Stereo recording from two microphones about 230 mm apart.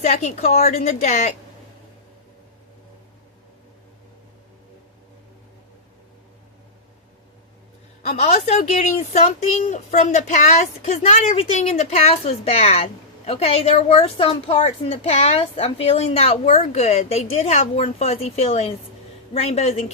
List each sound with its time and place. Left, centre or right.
0.0 s a woman's voice: left
8.0 s a woman's voice: left